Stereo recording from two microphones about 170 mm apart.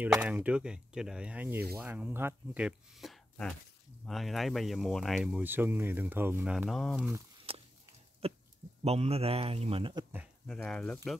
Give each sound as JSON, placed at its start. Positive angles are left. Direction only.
{"t": 0.1, "sound": "speech", "side_deg": -10}
{"t": 7.5, "sound": "a sound", "side_deg": -35}
{"t": 8.2, "sound": "a man's voice", "side_deg": -35}
{"t": 10.4, "sound": "speech", "side_deg": 5}